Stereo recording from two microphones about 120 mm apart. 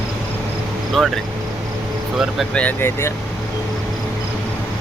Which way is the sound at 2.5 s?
15° left (ahead or behind).